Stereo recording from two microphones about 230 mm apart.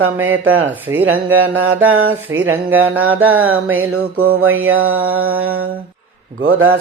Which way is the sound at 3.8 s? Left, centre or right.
Right.